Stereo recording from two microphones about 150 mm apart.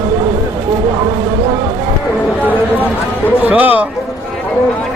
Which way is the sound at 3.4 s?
10° right (ahead or behind).